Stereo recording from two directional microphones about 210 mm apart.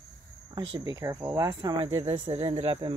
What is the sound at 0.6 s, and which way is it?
Speech, 20° right (ahead or behind).